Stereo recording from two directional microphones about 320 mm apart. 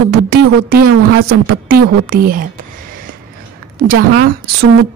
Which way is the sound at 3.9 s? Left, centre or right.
Right.